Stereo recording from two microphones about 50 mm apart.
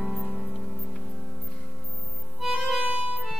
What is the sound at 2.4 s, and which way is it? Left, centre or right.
Music, centre.